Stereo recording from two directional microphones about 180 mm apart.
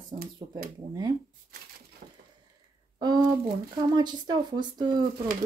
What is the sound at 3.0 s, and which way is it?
Speech, 20° right (ahead or behind).